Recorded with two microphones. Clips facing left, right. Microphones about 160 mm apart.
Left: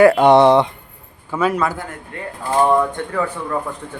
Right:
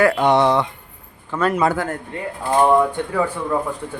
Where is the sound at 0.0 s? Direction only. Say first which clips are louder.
Left 5 dB; 30° left (ahead or behind).